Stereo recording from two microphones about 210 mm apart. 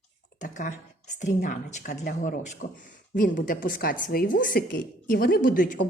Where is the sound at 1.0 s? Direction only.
35° left (ahead or behind).